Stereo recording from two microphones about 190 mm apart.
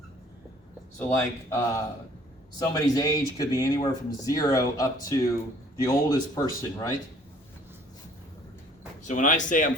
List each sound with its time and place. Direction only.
0.9 s speech: 15° left (ahead or behind)
9.0 s speech: 40° left (ahead or behind)